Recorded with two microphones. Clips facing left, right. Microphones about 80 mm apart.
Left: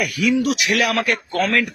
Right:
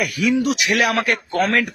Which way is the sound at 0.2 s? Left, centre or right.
Right.